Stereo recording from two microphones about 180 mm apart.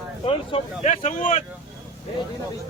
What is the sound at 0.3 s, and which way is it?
Speech, 35° left (ahead or behind).